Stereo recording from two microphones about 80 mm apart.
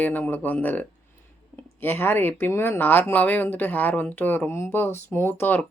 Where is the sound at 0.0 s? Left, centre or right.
Left.